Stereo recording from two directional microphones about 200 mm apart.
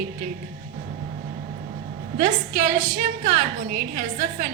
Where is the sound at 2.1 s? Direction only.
45° right (ahead or behind).